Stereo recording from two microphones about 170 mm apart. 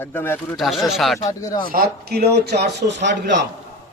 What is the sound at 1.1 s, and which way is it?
Speech, 20° left (ahead or behind).